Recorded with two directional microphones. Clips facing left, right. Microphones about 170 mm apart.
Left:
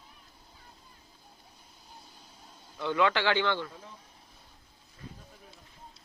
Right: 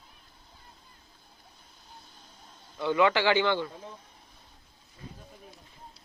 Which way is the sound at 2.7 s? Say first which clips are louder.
Right 3 dB; 10° right (ahead or behind).